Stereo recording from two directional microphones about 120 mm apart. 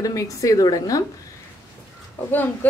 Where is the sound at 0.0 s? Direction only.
30° left (ahead or behind).